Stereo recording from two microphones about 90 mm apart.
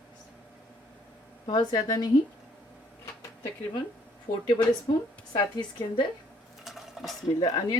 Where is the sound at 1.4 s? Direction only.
50° left (ahead or behind).